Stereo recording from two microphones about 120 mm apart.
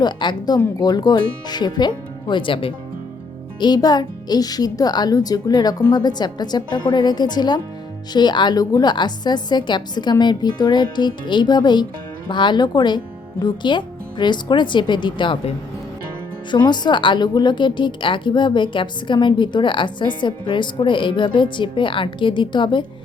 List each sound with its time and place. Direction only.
0.0 s a woman's voice: 40° left (ahead or behind)
16.5 s a woman's voice: 35° left (ahead or behind)